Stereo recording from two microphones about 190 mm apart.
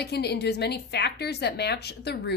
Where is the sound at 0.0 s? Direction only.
60° left (ahead or behind).